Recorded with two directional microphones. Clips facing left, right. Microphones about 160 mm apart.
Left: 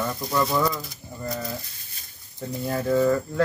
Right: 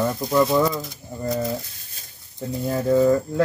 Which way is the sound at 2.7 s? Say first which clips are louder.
Right 3 dB; 15° right (ahead or behind).